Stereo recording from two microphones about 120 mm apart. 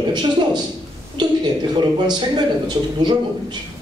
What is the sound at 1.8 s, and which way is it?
Speech, 40° right (ahead or behind).